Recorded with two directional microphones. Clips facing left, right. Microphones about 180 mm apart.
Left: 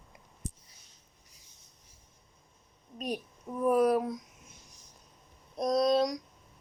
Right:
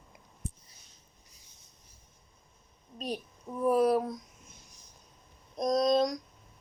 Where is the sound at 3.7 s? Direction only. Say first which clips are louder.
Even; 30° right (ahead or behind).